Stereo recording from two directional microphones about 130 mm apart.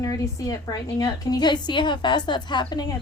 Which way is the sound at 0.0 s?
25° left (ahead or behind).